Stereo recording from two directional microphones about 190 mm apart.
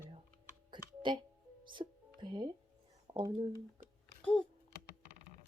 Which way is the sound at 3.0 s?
25° right (ahead or behind).